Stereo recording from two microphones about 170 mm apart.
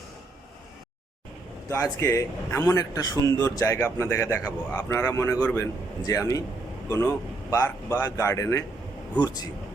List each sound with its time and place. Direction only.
1.7 s speech: 15° left (ahead or behind)